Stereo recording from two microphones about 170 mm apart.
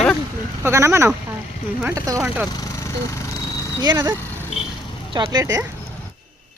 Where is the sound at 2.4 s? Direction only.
20° left (ahead or behind).